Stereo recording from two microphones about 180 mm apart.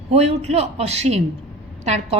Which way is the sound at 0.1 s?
35° right (ahead or behind).